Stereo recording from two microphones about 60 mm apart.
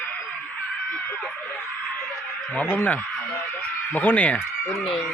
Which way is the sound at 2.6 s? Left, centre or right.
Left.